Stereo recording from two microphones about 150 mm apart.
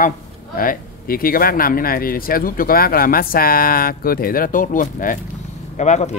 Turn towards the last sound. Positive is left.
turn(degrees=50)  # may be behind; listen again after turning